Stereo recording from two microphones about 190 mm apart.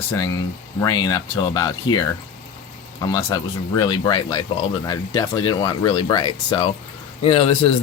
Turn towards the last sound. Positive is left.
turn(degrees=30)  # may be behind; listen again after turning